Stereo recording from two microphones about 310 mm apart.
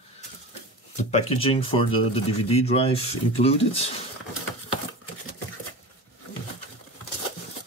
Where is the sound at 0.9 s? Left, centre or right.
Centre.